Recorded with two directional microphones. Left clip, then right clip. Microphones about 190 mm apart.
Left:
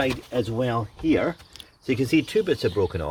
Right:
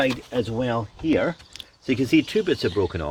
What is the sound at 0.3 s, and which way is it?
Speech, 25° right (ahead or behind).